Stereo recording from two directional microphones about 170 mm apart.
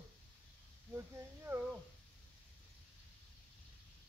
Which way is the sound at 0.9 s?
15° right (ahead or behind).